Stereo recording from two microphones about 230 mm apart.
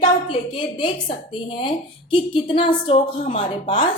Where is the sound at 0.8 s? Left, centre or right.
Left.